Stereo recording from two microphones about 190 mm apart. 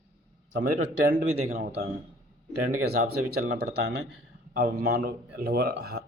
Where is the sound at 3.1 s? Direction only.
55° right (ahead or behind).